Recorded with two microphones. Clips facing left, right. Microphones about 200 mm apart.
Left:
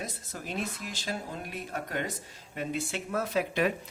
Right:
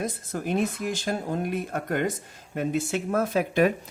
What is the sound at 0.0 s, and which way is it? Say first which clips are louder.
Speech: right 9 dB; 50° right (ahead or behind).